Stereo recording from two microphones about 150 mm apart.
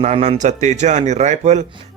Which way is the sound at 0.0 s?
45° right (ahead or behind).